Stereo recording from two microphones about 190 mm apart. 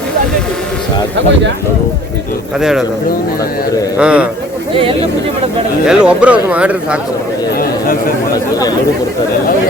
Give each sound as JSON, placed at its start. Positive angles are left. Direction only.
{"t": 2.6, "sound": "speech", "side_deg": -5}
{"t": 3.9, "sound": "a man's voice", "side_deg": -5}
{"t": 4.7, "sound": "speech", "side_deg": -30}
{"t": 5.8, "sound": "speech", "side_deg": -5}
{"t": 7.6, "sound": "speech", "side_deg": 50}